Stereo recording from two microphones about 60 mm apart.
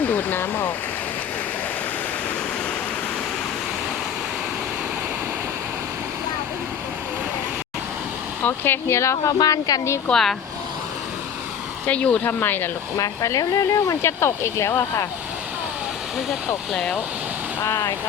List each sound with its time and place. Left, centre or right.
0.0 s speech: left
8.4 s speech: left
9.0 s speech: left
9.4 s speech: left
10.1 s speech: centre
11.9 s speech: left
13.0 s speech: left
14.0 s speech: left
16.7 s speech: centre
17.7 s speech: left